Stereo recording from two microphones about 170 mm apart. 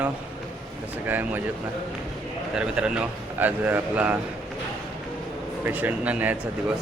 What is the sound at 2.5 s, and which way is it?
A man's voice, 5° right (ahead or behind).